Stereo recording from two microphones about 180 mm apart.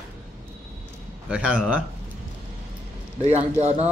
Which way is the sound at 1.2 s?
5° right (ahead or behind).